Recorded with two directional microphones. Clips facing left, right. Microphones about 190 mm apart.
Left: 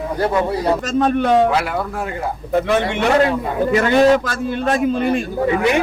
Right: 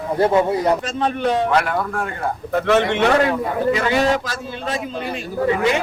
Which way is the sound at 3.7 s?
50° left (ahead or behind).